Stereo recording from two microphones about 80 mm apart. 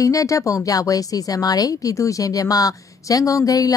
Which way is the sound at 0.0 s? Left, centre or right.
Left.